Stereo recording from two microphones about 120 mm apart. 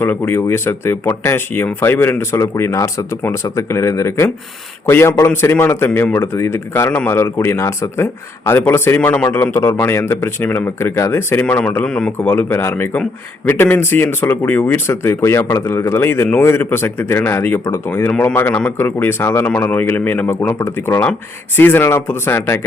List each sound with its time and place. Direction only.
0.0 s speech: 20° left (ahead or behind)